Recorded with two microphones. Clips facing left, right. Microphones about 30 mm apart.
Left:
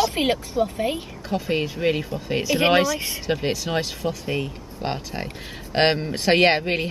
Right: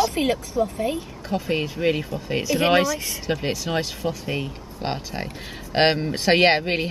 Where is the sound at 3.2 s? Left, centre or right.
Centre.